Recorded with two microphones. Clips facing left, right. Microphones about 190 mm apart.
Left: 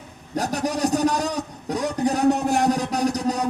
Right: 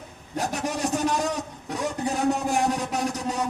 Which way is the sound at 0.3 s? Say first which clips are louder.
Left 4 dB; 35° left (ahead or behind).